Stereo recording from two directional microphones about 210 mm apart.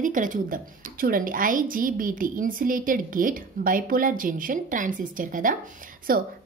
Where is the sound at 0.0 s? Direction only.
40° right (ahead or behind).